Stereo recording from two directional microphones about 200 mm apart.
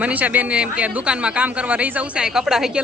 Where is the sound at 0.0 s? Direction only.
5° right (ahead or behind).